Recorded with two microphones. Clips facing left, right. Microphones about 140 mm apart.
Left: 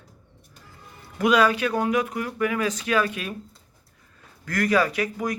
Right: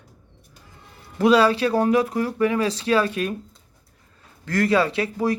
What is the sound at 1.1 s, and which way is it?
Speech, 30° right (ahead or behind).